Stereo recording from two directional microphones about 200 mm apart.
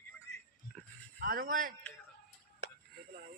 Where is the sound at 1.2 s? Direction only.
45° right (ahead or behind).